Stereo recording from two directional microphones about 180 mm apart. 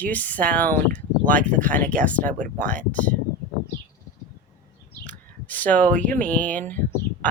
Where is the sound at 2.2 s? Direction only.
45° right (ahead or behind).